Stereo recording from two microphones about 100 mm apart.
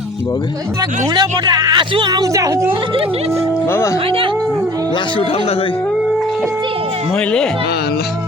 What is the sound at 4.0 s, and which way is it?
Speech, 65° right (ahead or behind).